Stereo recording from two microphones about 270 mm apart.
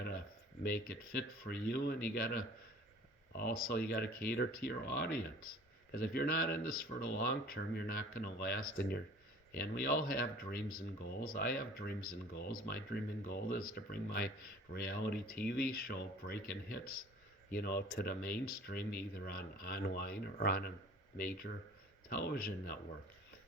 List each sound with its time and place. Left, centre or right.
0.7 s speech: left